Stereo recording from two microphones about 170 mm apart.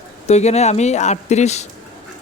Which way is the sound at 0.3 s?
40° left (ahead or behind).